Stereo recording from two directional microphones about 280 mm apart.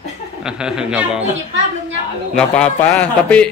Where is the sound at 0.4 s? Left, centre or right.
Centre.